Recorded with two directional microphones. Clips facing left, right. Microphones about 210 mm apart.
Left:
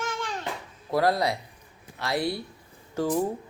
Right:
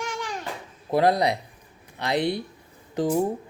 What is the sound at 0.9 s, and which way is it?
A child's voice, 20° right (ahead or behind).